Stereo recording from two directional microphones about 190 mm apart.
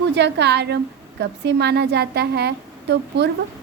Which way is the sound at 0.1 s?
65° right (ahead or behind).